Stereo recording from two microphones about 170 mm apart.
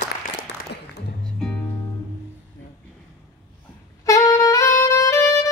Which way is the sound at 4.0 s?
20° left (ahead or behind).